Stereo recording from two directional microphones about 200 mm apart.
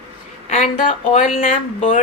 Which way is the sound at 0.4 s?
35° left (ahead or behind).